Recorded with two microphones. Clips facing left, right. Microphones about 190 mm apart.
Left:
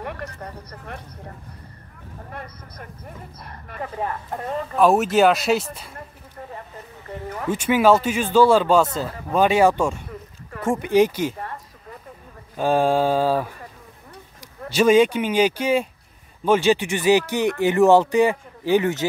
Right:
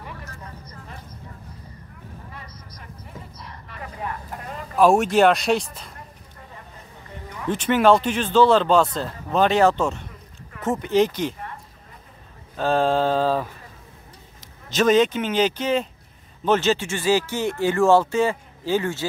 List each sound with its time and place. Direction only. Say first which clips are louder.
0.0 s speech: left 7 dB; 70° left (ahead or behind)
2.3 s speech: left 5 dB; 55° left (ahead or behind)
4.7 s speech: even; centre (ahead or behind)
7.2 s speech: left 1 dB; 45° left (ahead or behind)
7.5 s a man's voice: even; 10° left (ahead or behind)
12.5 s a man's voice: left 1 dB; 10° left (ahead or behind)
14.7 s a man's voice: left 2 dB; 10° left (ahead or behind)